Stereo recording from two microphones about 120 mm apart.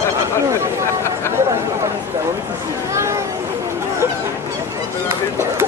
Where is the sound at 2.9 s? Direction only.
25° right (ahead or behind).